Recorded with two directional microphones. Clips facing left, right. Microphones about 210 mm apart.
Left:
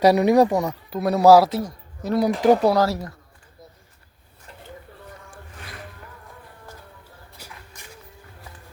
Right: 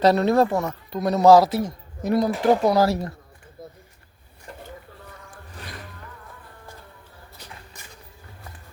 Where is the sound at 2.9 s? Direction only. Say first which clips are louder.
Right 3 dB; 25° right (ahead or behind).